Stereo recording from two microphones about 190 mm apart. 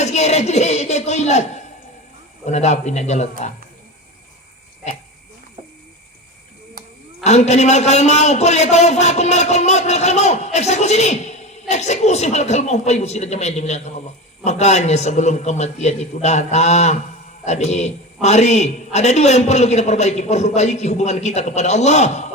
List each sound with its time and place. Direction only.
0.0 s a man's voice: 35° left (ahead or behind)
7.3 s a man's voice: 35° left (ahead or behind)